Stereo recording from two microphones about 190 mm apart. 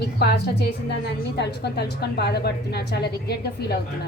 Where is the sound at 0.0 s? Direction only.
55° left (ahead or behind).